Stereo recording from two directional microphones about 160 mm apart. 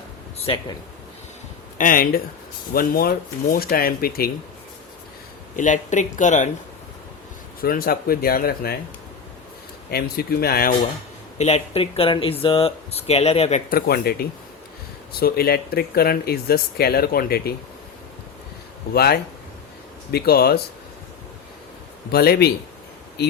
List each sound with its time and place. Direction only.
0.3 s speech: 40° left (ahead or behind)
1.8 s speech: 60° left (ahead or behind)
5.5 s speech: 50° left (ahead or behind)
7.6 s speech: 70° left (ahead or behind)
9.9 s speech: 75° left (ahead or behind)
11.3 s speech: 40° left (ahead or behind)
13.7 s speech: 70° left (ahead or behind)
18.9 s speech: 80° left
22.1 s speech: 80° left